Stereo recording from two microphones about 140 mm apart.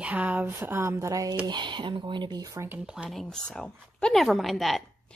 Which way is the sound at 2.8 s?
5° right (ahead or behind).